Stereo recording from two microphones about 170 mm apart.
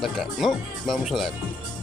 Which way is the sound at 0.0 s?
Centre (ahead or behind).